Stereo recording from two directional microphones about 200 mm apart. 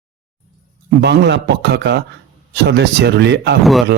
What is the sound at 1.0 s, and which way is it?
Speech, 55° right (ahead or behind).